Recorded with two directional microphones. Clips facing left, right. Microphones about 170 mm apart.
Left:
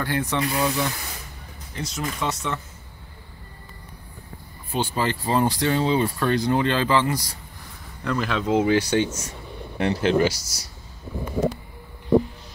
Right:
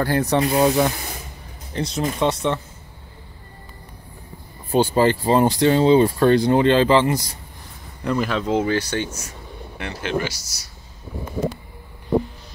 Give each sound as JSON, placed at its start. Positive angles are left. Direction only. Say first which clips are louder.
{"t": 0.0, "sound": "speech", "louder": "right 6 dB", "side_deg": -40}
{"t": 1.7, "sound": "speech", "louder": "right 6 dB", "side_deg": -30}
{"t": 4.6, "sound": "speech", "louder": "right 8 dB", "side_deg": -40}
{"t": 8.3, "sound": "speech", "louder": "left 4 dB", "side_deg": 5}
{"t": 9.8, "sound": "speech", "louder": "left 5 dB", "side_deg": 35}